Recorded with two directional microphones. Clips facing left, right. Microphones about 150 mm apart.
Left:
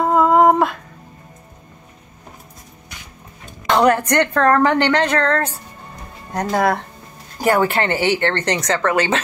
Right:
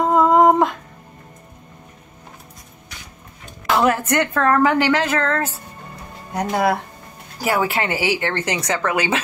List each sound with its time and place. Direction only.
0.0 s humming: 15° right (ahead or behind)
3.6 s a woman's voice: 5° right (ahead or behind)